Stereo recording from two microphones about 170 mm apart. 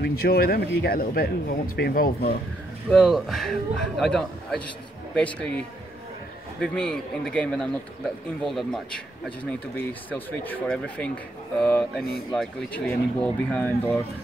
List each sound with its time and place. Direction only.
0.0 s speech: 60° left (ahead or behind)
2.9 s speech: 5° left (ahead or behind)